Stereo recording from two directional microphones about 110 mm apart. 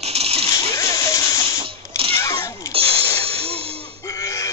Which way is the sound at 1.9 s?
60° right (ahead or behind).